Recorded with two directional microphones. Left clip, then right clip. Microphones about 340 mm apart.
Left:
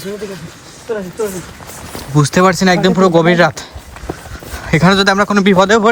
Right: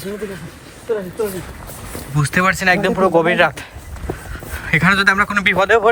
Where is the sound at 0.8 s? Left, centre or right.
Centre.